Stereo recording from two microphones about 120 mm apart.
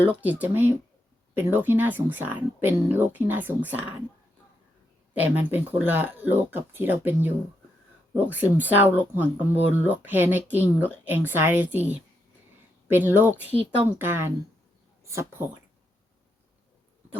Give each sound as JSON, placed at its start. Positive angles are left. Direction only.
{"t": 0.1, "sound": "speech", "side_deg": -10}
{"t": 5.1, "sound": "speech", "side_deg": -15}
{"t": 13.1, "sound": "speech", "side_deg": -15}